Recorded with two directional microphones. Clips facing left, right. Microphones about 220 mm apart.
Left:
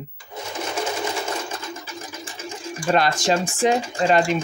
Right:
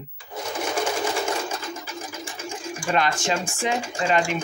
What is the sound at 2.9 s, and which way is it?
Speech, 35° left (ahead or behind).